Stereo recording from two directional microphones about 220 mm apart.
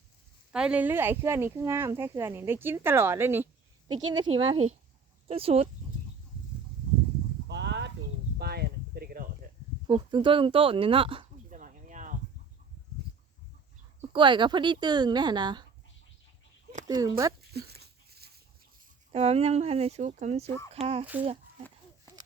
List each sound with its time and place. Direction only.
0.5 s speech: 5° right (ahead or behind); by 5.6 s 25° right (ahead or behind)
7.4 s a sound: 50° right (ahead or behind)
9.8 s speech: 20° right (ahead or behind)
11.4 s a sound: 35° right (ahead or behind)
14.1 s speech: 20° right (ahead or behind)
16.9 s speech: 15° right (ahead or behind)
17.7 s dog: 45° right (ahead or behind)
19.1 s speech: 30° right (ahead or behind)